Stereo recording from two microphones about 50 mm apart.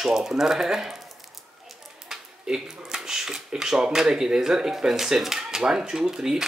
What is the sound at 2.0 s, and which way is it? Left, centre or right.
Speech, centre.